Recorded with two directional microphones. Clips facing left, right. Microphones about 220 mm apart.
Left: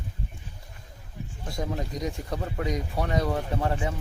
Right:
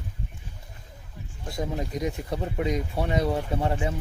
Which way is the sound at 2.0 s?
25° right (ahead or behind).